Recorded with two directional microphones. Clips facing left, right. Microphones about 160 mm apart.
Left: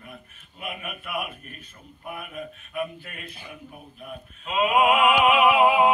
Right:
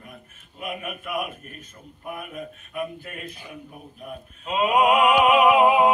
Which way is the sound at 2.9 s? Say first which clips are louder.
Right 4 dB; 40° right (ahead or behind).